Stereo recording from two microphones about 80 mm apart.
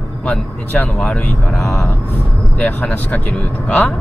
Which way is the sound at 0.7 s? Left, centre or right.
Left.